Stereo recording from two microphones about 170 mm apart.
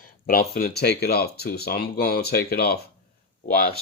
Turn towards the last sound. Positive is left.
turn(degrees=65)  # may be behind; listen again after turning